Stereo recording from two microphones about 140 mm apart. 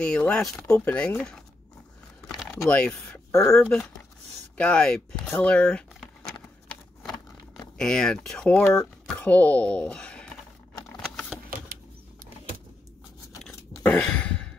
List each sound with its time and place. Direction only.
0.0 s speech: 5° left (ahead or behind)
2.2 s typing: centre (ahead or behind)
3.3 s speech: 20° left (ahead or behind)
3.5 s speech: 10° left (ahead or behind)
5.2 s a sound: 10° left (ahead or behind)
7.7 s speech: 5° left (ahead or behind)
13.5 s a sound: 10° left (ahead or behind)